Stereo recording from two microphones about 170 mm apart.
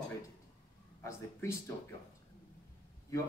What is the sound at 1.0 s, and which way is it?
Speech, 15° left (ahead or behind).